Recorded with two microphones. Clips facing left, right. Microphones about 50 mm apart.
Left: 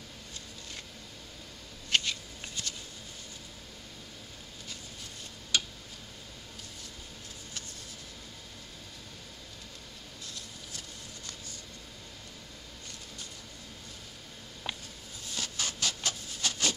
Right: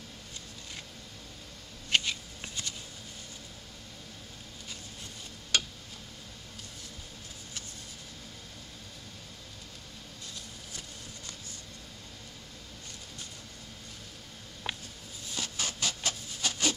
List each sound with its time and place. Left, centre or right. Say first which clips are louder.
1.9 s shuffling cards: right 1 dB; centre
15.3 s a sound: even; centre
16.1 s wood: even; centre